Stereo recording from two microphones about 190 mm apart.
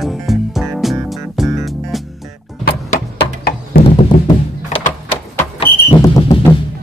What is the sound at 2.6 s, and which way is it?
Music, 50° left (ahead or behind).